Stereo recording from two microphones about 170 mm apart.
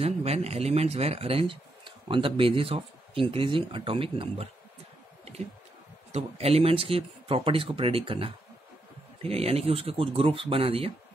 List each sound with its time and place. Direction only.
0.0 s speech: 40° right (ahead or behind)
6.1 s speech: 35° right (ahead or behind)